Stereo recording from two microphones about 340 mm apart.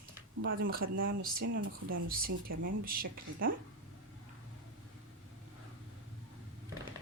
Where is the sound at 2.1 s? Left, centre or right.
Right.